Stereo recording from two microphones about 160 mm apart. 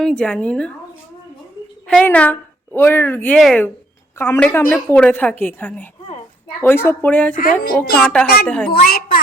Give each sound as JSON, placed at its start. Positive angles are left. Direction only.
{"t": 0.0, "sound": "a woman's voice", "side_deg": 5}
{"t": 1.9, "sound": "a woman's voice", "side_deg": 10}
{"t": 3.3, "sound": "a woman's voice", "side_deg": 0}
{"t": 4.2, "sound": "a woman's voice", "side_deg": 15}
{"t": 7.3, "sound": "music", "side_deg": 60}
{"t": 7.9, "sound": "a woman's voice", "side_deg": 5}
{"t": 8.7, "sound": "a woman's voice", "side_deg": 70}